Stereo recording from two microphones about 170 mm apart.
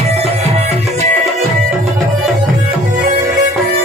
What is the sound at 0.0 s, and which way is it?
Music, 40° right (ahead or behind).